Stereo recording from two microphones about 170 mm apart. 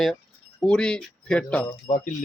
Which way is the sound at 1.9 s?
40° left (ahead or behind).